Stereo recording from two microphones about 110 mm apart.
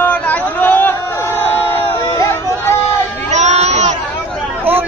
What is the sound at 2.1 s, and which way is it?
Hubbub, 20° left (ahead or behind).